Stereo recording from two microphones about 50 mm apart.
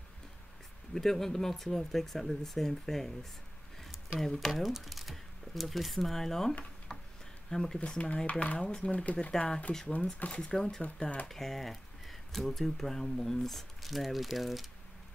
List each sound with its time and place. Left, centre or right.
0.9 s speech: centre
4.2 s speech: centre
6.9 s a sound: centre
7.5 s speech: centre
7.8 s speech: left
8.6 s speech: centre
8.9 s speech: left; by 10.8 s centre
10.8 s speech: left
11.2 s speech: centre